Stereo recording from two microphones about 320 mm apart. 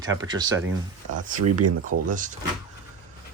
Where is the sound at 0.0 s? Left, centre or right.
Centre.